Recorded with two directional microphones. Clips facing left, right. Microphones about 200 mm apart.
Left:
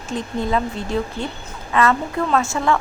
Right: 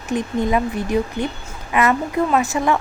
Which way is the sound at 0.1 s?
15° right (ahead or behind).